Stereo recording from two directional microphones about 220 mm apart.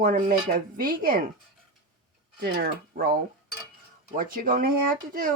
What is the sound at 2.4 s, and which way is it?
Dishes, 40° right (ahead or behind).